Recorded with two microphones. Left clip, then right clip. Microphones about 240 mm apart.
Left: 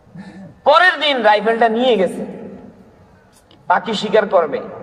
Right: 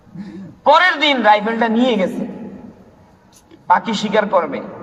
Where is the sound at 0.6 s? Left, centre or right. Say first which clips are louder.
Even; left.